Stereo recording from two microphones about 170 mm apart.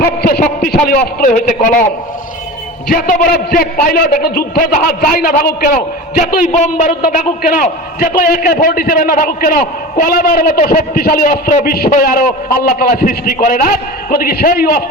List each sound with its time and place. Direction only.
0.0 s a man's voice: 65° left (ahead or behind)
2.8 s a man's voice: 55° left (ahead or behind)